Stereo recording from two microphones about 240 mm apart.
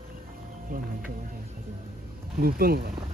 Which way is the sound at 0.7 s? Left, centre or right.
Right.